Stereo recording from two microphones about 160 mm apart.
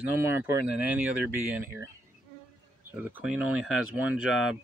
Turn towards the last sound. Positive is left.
turn(degrees=-5)  # may be behind; listen again after turning